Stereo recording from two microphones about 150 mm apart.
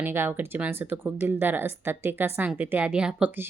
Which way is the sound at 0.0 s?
15° right (ahead or behind).